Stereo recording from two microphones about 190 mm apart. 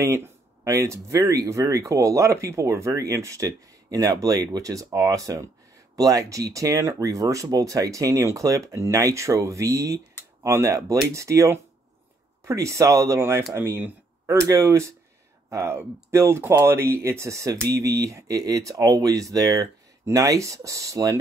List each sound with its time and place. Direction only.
0.0 s speech: 15° right (ahead or behind)